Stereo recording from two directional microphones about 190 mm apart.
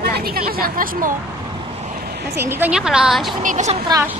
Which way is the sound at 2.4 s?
10° right (ahead or behind).